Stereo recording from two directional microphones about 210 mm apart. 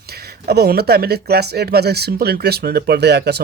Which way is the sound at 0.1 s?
50° right (ahead or behind).